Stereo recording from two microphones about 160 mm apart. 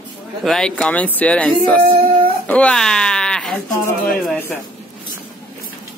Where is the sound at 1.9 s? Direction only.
35° right (ahead or behind).